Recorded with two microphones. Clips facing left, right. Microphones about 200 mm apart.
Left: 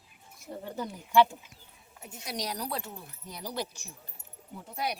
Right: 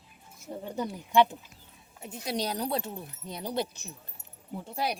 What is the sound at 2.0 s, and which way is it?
Speech, 25° right (ahead or behind).